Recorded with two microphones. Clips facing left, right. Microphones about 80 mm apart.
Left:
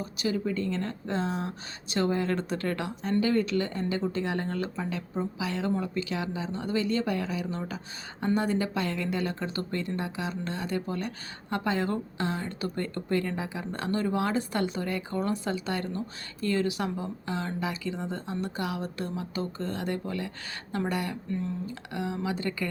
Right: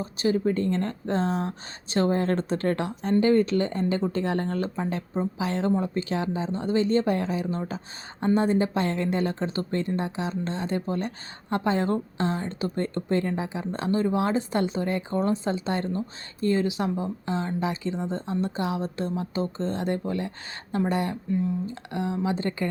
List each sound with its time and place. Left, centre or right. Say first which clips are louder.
0.0 s speech: right 5 dB; right